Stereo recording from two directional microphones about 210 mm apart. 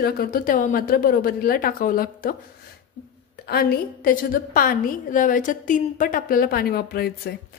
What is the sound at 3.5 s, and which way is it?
Speech, 45° left (ahead or behind).